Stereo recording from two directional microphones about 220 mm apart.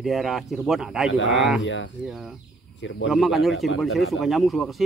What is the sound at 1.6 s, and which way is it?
Speech, 60° left (ahead or behind).